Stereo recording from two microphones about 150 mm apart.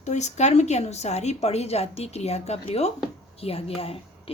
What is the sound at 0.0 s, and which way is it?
A woman's voice, 50° left (ahead or behind).